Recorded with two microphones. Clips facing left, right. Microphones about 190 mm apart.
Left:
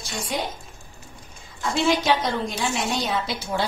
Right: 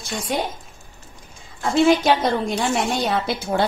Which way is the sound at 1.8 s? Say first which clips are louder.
Right 4 dB; 50° right (ahead or behind).